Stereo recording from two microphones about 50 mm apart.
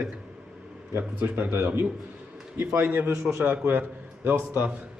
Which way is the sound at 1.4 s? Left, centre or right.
Right.